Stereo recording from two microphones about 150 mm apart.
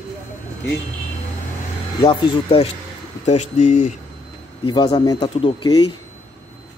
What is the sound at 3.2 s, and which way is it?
Speech, 50° left (ahead or behind).